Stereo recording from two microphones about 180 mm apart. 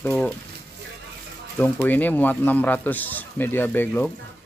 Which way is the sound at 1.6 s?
10° left (ahead or behind).